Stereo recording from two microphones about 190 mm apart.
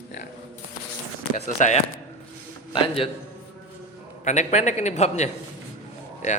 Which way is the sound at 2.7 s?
30° left (ahead or behind).